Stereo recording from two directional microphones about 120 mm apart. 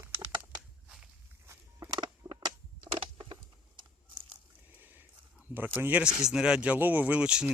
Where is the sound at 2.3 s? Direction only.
40° right (ahead or behind).